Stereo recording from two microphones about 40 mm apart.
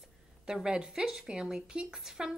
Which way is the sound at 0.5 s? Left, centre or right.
Centre.